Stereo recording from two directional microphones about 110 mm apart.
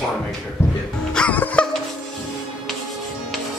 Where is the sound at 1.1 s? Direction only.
10° left (ahead or behind).